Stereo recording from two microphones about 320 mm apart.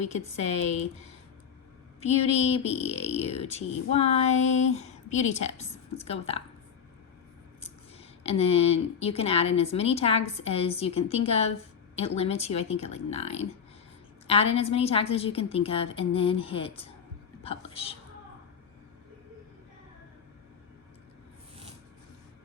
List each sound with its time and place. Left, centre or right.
0.0 s speech: left
2.0 s speech: centre
7.6 s speech: centre
14.5 s a woman's voice: centre